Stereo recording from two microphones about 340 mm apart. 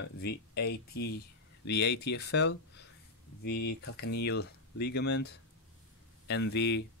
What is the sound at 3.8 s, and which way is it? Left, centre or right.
Speech, left.